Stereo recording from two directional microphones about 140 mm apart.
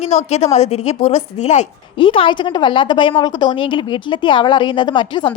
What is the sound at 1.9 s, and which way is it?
A woman's voice, 40° left (ahead or behind).